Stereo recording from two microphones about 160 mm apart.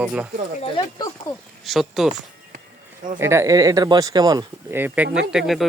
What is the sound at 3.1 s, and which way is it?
Speech, 15° right (ahead or behind).